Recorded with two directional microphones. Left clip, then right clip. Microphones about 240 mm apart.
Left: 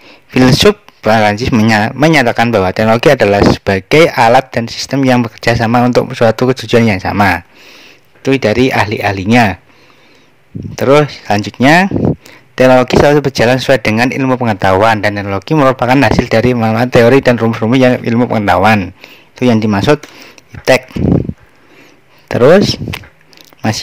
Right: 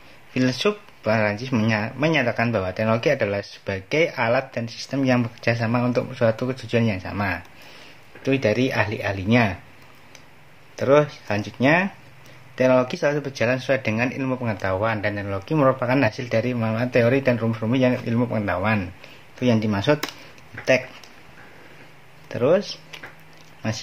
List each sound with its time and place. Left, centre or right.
0.3 s speech: left
10.8 s speech: left
22.3 s speech: left